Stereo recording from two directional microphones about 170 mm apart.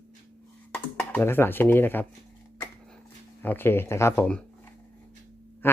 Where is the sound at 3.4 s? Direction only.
10° left (ahead or behind).